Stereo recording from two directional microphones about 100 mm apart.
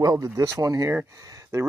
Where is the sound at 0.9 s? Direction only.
20° right (ahead or behind).